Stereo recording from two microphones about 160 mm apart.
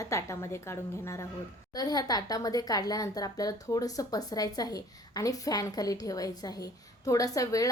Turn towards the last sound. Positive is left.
turn(degrees=20)  # may be behind; listen again after turning